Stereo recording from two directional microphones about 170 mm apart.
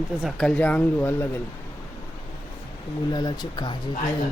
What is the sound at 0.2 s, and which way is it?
Speech, centre (ahead or behind).